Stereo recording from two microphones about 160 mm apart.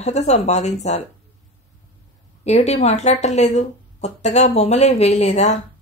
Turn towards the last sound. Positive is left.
turn(degrees=45)  # may be behind; listen again after turning